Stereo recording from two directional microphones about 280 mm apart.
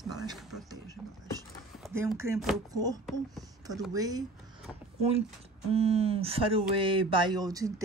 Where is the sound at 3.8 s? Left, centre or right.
Centre.